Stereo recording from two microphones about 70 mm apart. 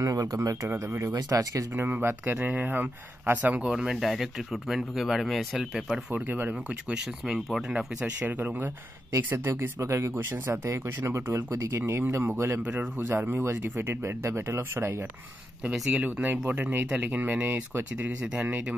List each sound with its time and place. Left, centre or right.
0.0 s speech: right
1.1 s speech: right
1.7 s speech: right
3.6 s speech: centre
6.1 s speech: right
6.5 s speech: centre
8.3 s speech: right
9.5 s speech: right
12.6 s speech: right
15.9 s speech: centre
18.2 s speech: centre